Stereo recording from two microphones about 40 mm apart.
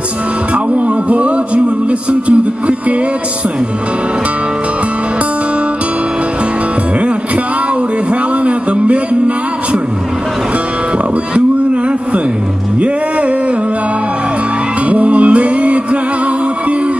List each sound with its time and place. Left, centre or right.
0.7 s music: right
8.1 s a sound: right
14.9 s music: right